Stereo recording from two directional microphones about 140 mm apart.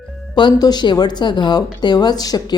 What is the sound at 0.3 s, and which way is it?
A woman's voice, 30° left (ahead or behind).